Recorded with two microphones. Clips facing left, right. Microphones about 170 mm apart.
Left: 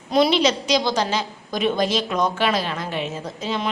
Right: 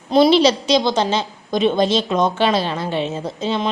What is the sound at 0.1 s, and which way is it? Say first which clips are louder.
A woman's voice: right 5 dB; 30° right (ahead or behind).